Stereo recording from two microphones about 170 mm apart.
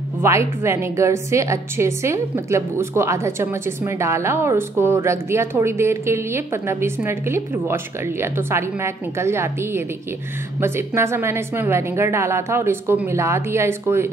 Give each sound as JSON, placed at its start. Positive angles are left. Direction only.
{"t": 0.2, "sound": "a woman's voice", "side_deg": -15}